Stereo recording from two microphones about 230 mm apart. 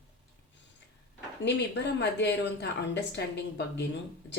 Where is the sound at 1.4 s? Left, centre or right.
Left.